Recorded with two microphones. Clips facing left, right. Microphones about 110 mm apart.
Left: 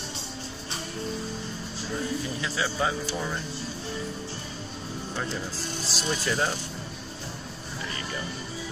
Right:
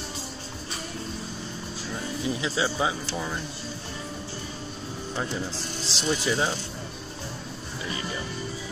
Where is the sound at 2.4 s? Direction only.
15° right (ahead or behind).